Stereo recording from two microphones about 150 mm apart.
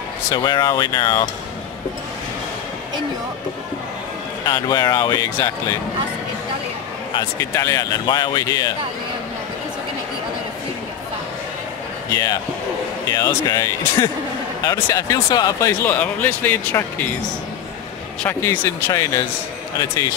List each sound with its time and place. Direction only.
0.3 s speech: 30° left (ahead or behind)
4.5 s speech: 25° left (ahead or behind)
7.2 s speech: 20° left (ahead or behind)
12.1 s speech: 25° left (ahead or behind)
15.8 s speech: 10° left (ahead or behind)
18.2 s speech: 15° left (ahead or behind)